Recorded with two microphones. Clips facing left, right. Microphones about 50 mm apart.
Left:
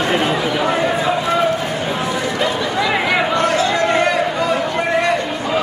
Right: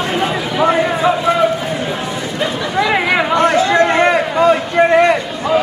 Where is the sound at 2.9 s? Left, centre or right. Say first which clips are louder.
Right 3 dB; centre.